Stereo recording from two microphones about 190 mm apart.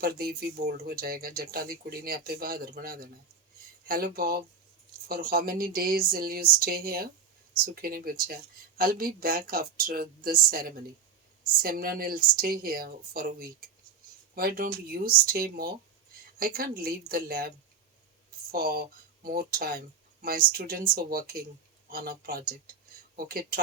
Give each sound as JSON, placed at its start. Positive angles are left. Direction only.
{"t": 0.0, "sound": "speech", "side_deg": -55}
{"t": 18.5, "sound": "speech", "side_deg": -55}